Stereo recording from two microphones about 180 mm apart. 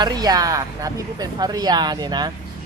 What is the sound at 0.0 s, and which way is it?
Speech, 20° right (ahead or behind).